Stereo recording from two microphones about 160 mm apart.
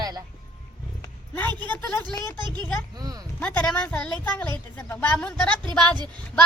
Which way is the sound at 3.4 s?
10° left (ahead or behind).